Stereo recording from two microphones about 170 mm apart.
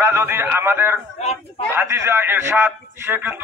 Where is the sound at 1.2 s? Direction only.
40° left (ahead or behind).